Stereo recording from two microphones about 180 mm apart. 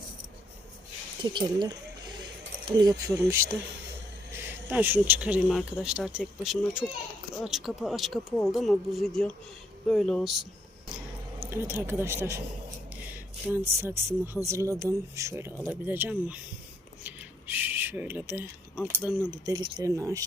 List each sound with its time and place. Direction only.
1.2 s speech: 25° right (ahead or behind); by 10.4 s centre (ahead or behind)
11.4 s speech: 15° right (ahead or behind)
13.5 s speech: 15° right (ahead or behind)
17.1 s a sound: 10° right (ahead or behind)
19.3 s speech: 20° right (ahead or behind)